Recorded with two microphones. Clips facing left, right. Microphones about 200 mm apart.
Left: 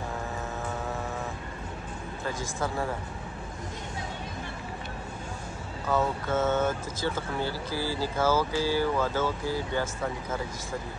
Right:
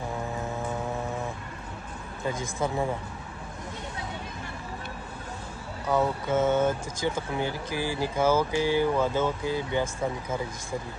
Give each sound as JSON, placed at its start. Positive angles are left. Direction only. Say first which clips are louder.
{"t": 2.2, "sound": "speech", "louder": "right 3 dB", "side_deg": -20}
{"t": 5.9, "sound": "speech", "louder": "right 2 dB", "side_deg": -15}